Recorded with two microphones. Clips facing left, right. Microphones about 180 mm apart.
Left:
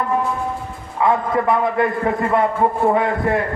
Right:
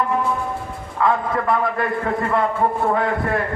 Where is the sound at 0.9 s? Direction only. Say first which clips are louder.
Left 2 dB; 20° left (ahead or behind).